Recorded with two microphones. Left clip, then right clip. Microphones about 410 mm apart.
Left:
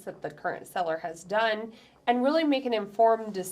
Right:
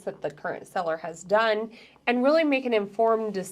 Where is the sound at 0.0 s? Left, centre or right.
Right.